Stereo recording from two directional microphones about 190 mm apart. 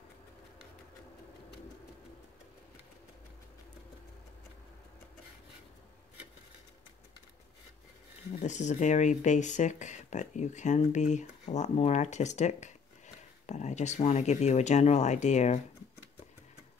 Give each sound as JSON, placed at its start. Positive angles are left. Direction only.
{"t": 8.3, "sound": "speech", "side_deg": 40}